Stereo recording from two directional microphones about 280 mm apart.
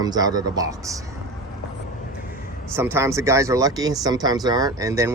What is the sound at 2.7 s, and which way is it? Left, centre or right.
Speech, centre.